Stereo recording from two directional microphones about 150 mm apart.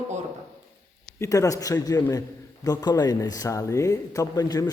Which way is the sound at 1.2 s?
20° left (ahead or behind).